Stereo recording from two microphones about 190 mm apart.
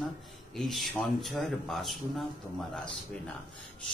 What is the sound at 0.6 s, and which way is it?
A man's voice, centre (ahead or behind).